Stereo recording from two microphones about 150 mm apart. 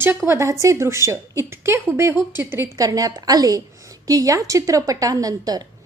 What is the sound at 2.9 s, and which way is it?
A woman's voice, 25° right (ahead or behind).